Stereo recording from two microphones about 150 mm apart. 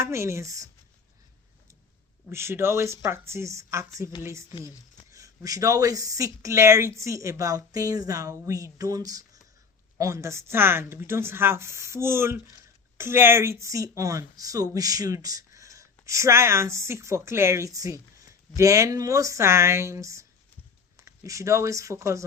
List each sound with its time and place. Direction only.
0.0 s speech: 20° right (ahead or behind)
2.3 s speech: 15° right (ahead or behind)